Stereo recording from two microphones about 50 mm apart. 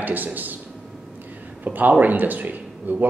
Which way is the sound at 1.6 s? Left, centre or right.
Right.